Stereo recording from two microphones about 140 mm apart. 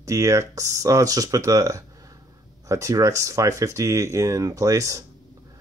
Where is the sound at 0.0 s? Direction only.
20° right (ahead or behind).